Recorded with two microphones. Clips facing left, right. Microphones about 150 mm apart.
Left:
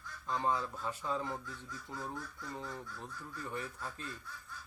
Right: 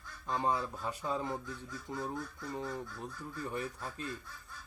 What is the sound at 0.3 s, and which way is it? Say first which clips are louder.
Speech: right 1 dB; 15° right (ahead or behind).